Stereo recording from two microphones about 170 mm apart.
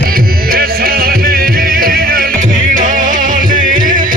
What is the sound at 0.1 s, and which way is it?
Music, 60° right (ahead or behind).